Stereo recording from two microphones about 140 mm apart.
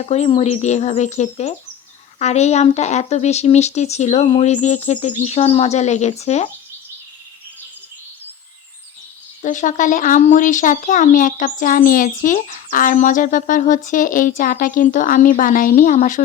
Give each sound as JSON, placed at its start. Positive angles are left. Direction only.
{"t": 0.0, "sound": "speech", "side_deg": 50}
{"t": 9.4, "sound": "speech", "side_deg": 65}